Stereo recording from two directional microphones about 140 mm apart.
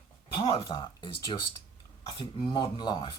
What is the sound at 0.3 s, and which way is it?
Speech, 45° left (ahead or behind).